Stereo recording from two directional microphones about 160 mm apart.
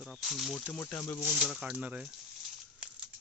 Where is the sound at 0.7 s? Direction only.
15° left (ahead or behind).